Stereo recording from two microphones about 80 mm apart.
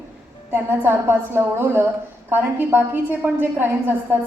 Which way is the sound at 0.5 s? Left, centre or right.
Right.